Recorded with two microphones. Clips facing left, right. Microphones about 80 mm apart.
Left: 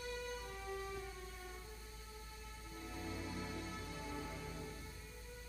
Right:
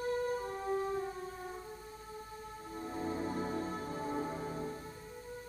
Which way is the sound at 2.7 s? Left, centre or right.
Right.